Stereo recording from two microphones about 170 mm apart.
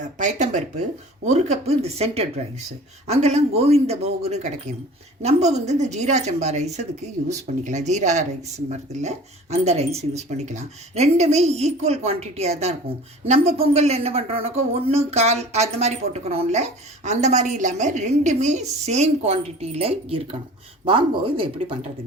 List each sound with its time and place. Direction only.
0.2 s a woman's voice: 45° right (ahead or behind)